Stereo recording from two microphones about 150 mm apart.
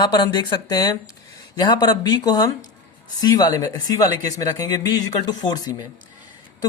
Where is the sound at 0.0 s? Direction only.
25° left (ahead or behind).